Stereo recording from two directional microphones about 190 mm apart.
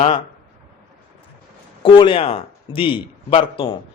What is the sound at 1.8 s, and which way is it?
A man's voice, 25° left (ahead or behind).